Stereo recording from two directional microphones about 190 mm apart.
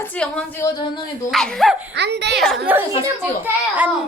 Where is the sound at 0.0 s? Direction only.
5° left (ahead or behind); by 1.0 s 25° left (ahead or behind).